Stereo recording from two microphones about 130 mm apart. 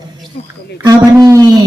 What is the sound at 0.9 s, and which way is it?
Speech, 30° right (ahead or behind).